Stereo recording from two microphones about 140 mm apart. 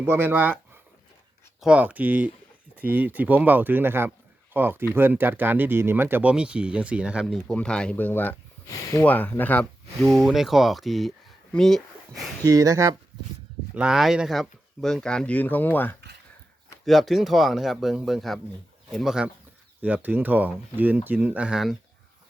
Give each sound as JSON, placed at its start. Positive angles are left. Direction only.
{"t": 0.0, "sound": "speech", "side_deg": -15}
{"t": 7.4, "sound": "speech", "side_deg": 5}
{"t": 12.5, "sound": "speech", "side_deg": -25}
{"t": 13.7, "sound": "speech", "side_deg": -5}
{"t": 16.8, "sound": "speech", "side_deg": 0}